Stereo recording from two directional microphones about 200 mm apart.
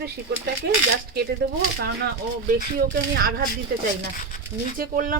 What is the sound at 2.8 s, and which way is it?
Speech, 45° right (ahead or behind).